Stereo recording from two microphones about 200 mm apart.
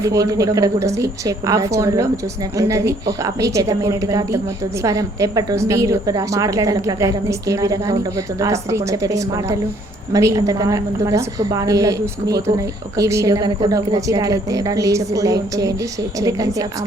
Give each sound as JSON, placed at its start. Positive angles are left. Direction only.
{"t": 0.0, "sound": "a woman's voice", "side_deg": -15}